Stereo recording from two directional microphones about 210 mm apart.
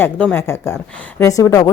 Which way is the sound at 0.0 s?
10° left (ahead or behind).